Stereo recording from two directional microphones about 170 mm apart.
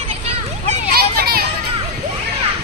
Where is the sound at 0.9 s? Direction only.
65° right (ahead or behind).